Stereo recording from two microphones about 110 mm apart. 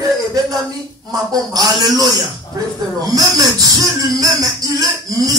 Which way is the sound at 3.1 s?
35° right (ahead or behind).